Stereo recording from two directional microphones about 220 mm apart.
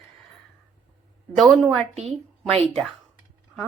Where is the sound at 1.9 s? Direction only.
30° right (ahead or behind).